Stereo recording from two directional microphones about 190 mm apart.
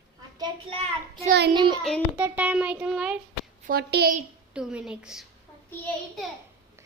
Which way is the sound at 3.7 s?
60° right (ahead or behind).